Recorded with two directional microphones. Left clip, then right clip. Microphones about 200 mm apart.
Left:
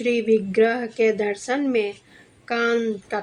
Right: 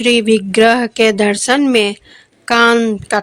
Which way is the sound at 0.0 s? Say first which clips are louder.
Right 8 dB; 45° right (ahead or behind).